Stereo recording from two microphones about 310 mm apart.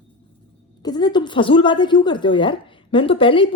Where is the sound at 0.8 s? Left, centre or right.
Centre.